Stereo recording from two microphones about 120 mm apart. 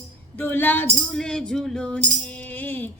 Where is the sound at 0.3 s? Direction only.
15° left (ahead or behind).